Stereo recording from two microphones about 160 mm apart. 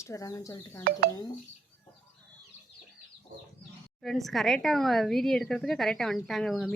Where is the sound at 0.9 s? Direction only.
70° right (ahead or behind).